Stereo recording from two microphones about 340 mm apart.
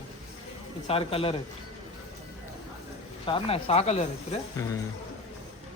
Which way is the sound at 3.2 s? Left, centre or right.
Centre.